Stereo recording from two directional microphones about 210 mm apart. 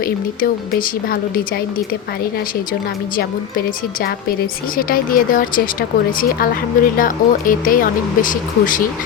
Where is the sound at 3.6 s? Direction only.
45° left (ahead or behind).